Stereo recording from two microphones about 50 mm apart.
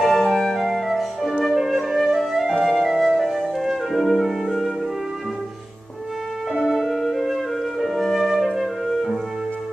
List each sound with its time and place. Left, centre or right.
0.0 s music: centre
0.6 s music: centre
6.7 s music: centre